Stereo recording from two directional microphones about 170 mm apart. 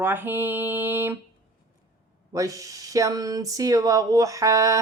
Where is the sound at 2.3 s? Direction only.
20° right (ahead or behind).